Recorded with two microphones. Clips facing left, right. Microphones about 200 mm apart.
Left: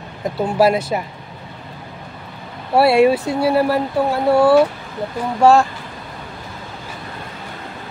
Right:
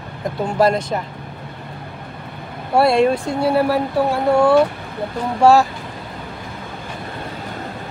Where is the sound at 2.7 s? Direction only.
5° left (ahead or behind).